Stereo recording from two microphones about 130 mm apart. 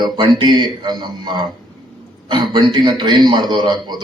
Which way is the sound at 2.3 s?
35° right (ahead or behind).